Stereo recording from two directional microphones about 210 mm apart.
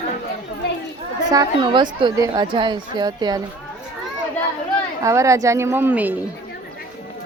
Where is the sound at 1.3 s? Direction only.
20° right (ahead or behind).